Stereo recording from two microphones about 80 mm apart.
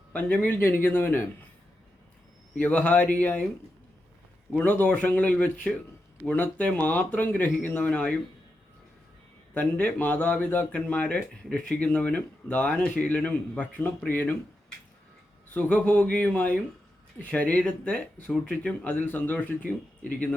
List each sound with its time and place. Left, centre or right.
0.1 s speech: centre
2.6 s speech: centre
4.5 s speech: centre
9.6 s speech: centre
15.5 s speech: centre